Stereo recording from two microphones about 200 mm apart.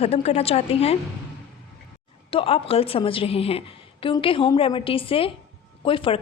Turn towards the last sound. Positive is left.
turn(degrees=25)  # may be behind; listen again after turning